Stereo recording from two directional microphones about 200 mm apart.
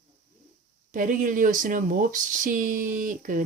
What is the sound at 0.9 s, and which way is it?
Speech, 40° right (ahead or behind).